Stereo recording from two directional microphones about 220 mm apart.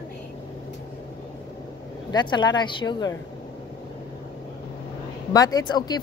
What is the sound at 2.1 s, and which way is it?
Speech, 20° left (ahead or behind).